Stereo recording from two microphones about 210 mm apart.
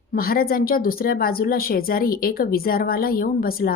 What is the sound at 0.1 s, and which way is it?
A woman's voice, 45° left (ahead or behind).